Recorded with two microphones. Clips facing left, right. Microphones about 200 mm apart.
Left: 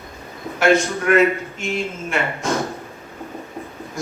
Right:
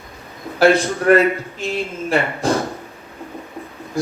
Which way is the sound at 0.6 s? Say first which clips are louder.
Right 3 dB; 35° right (ahead or behind).